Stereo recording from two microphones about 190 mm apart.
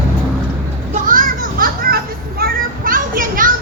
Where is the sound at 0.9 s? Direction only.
45° right (ahead or behind).